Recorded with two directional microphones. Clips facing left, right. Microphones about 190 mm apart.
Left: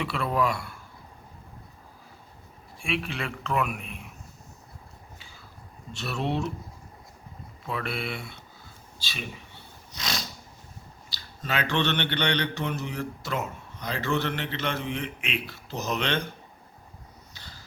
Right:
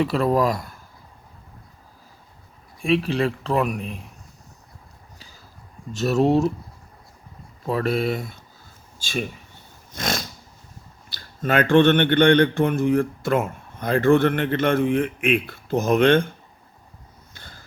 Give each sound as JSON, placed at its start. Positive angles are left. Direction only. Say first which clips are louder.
{"t": 0.0, "sound": "speech", "louder": "right 7 dB", "side_deg": -40}
{"t": 2.8, "sound": "speech", "louder": "right 11 dB", "side_deg": -35}
{"t": 5.9, "sound": "speech", "louder": "right 11 dB", "side_deg": -40}
{"t": 7.6, "sound": "speech", "louder": "right 10 dB", "side_deg": -40}
{"t": 17.3, "sound": "vehicle", "louder": "right 4 dB", "side_deg": -50}